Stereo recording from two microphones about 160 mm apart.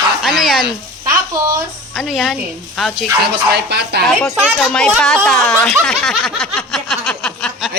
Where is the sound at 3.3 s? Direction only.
90° right.